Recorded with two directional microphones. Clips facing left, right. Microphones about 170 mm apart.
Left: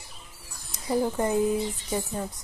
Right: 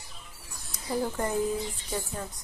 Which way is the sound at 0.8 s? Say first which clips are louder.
Left 4 dB; 20° left (ahead or behind).